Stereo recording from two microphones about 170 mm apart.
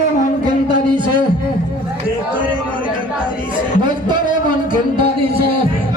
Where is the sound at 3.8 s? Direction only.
25° right (ahead or behind).